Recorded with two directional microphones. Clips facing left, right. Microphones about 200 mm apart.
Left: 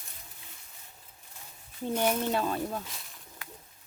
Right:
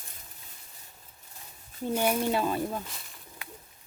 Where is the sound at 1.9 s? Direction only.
10° right (ahead or behind).